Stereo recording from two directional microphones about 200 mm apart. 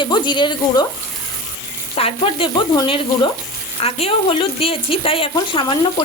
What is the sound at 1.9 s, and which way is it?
Speech, 25° left (ahead or behind).